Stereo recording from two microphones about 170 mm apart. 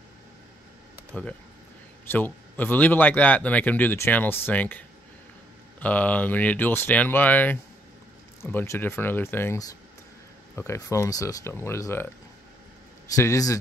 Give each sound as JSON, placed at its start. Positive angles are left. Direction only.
{"t": 2.0, "sound": "speech", "side_deg": 10}
{"t": 13.1, "sound": "speech", "side_deg": 20}